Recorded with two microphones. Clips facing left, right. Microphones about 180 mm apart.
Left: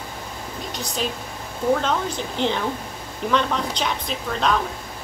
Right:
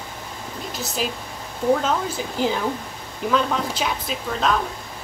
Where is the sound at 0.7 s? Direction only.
5° right (ahead or behind).